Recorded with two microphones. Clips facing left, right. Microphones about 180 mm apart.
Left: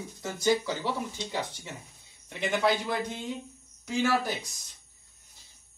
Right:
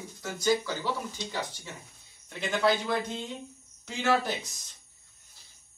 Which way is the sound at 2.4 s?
15° left (ahead or behind).